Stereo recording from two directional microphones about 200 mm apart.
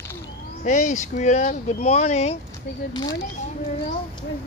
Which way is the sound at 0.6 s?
40° left (ahead or behind).